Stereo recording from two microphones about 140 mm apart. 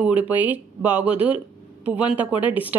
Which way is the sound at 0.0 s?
10° right (ahead or behind).